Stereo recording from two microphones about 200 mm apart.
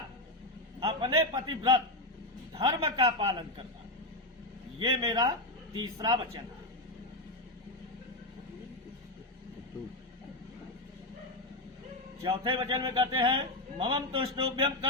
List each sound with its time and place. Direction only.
0.8 s speech: 25° right (ahead or behind)
4.8 s speech: 25° right (ahead or behind)
12.2 s speech: 25° right (ahead or behind)